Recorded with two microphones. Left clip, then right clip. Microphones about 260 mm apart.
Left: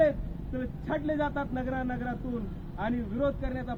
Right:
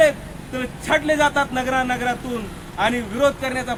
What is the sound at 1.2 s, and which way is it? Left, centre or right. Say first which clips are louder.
A man's voice: right 13 dB; centre.